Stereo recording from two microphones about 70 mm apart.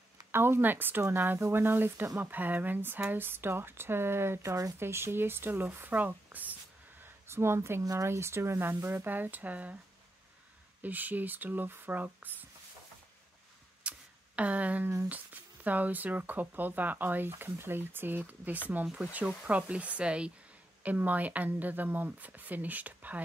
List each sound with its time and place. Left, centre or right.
0.3 s speech: right
4.7 s speech: right
7.2 s speech: right
7.8 s speech: right
10.8 s speech: right
13.8 s a sound: centre
15.0 s speech: right